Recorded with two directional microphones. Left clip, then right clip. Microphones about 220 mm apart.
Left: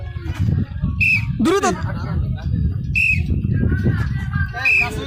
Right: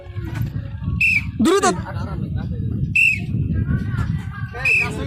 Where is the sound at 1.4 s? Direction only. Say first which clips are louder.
Right 3 dB; 5° right (ahead or behind).